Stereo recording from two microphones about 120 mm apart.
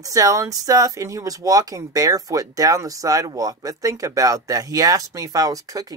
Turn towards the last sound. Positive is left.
turn(degrees=-30)  # may be behind; listen again after turning